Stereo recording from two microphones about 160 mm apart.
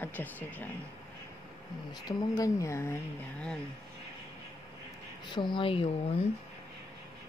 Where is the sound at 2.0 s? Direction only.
25° left (ahead or behind).